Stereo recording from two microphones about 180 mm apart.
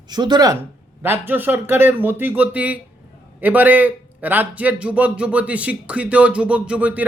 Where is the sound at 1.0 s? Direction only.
10° right (ahead or behind).